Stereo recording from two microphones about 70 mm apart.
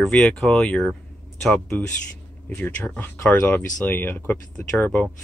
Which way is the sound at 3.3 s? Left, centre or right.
Left.